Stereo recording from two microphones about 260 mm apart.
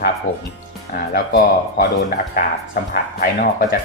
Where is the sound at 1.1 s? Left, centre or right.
Left.